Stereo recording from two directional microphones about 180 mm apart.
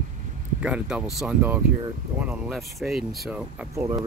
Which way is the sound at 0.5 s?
5° right (ahead or behind).